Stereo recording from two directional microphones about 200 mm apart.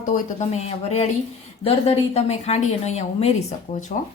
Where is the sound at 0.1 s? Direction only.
35° left (ahead or behind).